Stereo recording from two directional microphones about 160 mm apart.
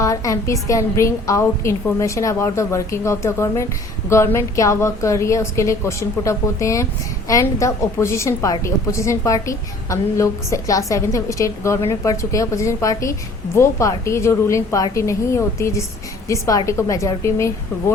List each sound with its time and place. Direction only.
0.0 s a woman's voice: 20° left (ahead or behind)